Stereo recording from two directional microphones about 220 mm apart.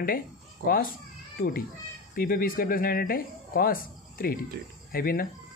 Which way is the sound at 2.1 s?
40° left (ahead or behind).